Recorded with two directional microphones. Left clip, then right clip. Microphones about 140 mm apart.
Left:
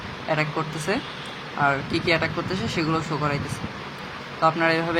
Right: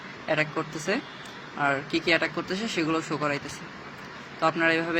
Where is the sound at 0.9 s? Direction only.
25° right (ahead or behind).